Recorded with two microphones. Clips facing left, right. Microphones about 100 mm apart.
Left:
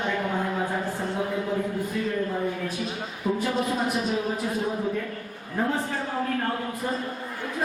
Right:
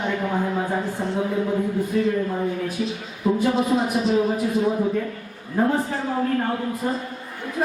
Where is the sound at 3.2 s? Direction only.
35° right (ahead or behind).